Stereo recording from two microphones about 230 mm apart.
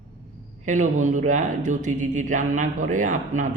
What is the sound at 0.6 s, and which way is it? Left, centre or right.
Speech, right.